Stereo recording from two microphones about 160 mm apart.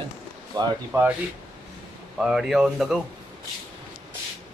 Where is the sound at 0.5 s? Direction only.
25° right (ahead or behind).